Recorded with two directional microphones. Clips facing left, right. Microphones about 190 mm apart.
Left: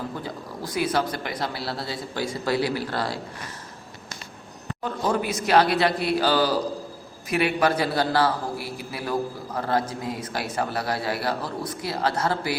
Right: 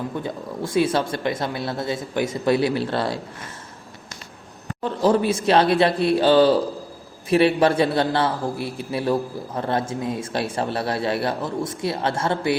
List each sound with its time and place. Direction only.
0.2 s speech: 25° right (ahead or behind)
4.8 s speech: 25° right (ahead or behind)